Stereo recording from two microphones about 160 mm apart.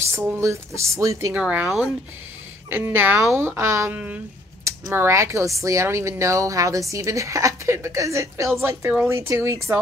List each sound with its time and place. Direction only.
0.1 s speech: 15° right (ahead or behind)